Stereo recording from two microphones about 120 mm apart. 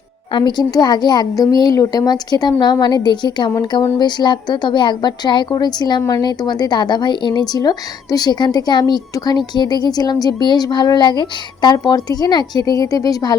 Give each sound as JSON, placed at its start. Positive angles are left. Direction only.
{"t": 0.3, "sound": "speech", "side_deg": 40}